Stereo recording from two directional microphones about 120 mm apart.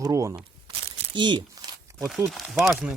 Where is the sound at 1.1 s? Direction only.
40° right (ahead or behind).